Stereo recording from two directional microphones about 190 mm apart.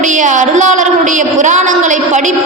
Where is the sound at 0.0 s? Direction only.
40° right (ahead or behind).